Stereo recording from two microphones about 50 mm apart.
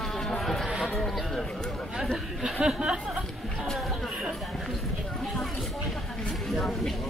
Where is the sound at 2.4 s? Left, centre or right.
Centre.